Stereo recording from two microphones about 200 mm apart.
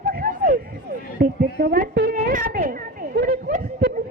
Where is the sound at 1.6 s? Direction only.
55° right (ahead or behind).